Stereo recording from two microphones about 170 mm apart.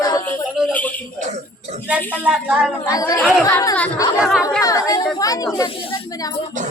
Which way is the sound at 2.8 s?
20° left (ahead or behind).